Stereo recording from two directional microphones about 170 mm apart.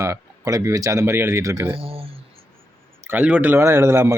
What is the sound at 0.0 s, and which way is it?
Speech, 20° right (ahead or behind).